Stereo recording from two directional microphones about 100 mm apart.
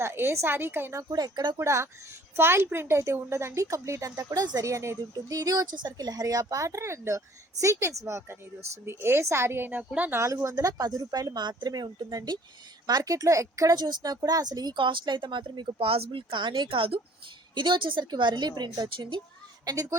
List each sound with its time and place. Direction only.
0.0 s speech: 25° right (ahead or behind)
1.1 s speech: 45° right (ahead or behind)
1.5 s speech: 30° right (ahead or behind)
10.2 s speech: 30° right (ahead or behind); by 17.0 s 65° right (ahead or behind)
17.5 s speech: 50° right (ahead or behind)
19.6 s speech: 40° right (ahead or behind)